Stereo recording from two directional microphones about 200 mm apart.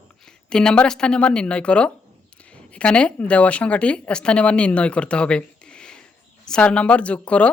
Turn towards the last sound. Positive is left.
turn(degrees=5)  # may be behind; listen again after turning